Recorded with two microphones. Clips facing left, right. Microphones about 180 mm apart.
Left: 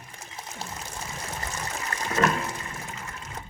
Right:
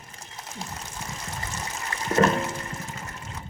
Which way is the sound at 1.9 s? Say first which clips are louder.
Left 1 dB; 40° left (ahead or behind).